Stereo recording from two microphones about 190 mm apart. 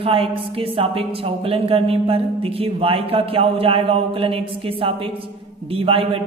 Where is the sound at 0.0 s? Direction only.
30° right (ahead or behind).